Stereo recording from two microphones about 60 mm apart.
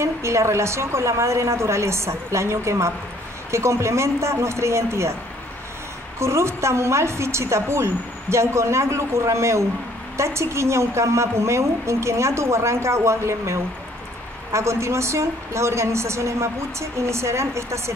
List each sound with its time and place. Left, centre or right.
0.0 s a woman's voice: right
6.1 s a woman's voice: right